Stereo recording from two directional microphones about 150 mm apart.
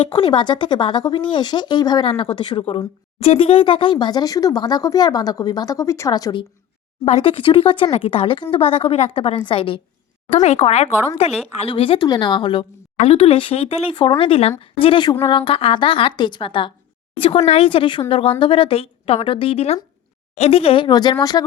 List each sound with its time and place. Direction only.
0.1 s speech: 30° left (ahead or behind)
7.0 s a woman's voice: 40° left (ahead or behind)
10.3 s a woman's voice: 45° left (ahead or behind); by 21.4 s 25° left (ahead or behind)